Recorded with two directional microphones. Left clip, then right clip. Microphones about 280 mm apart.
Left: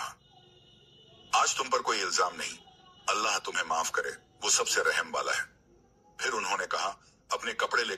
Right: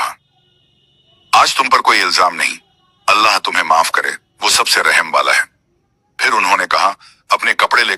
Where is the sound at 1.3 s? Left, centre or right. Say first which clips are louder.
Right 17 dB; right.